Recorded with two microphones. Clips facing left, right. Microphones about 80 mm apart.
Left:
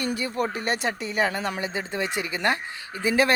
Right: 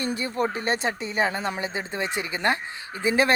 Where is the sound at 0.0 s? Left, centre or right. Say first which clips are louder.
Right 1 dB; right.